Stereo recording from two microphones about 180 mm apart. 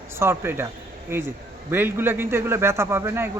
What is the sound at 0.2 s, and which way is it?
A man's voice, 15° right (ahead or behind).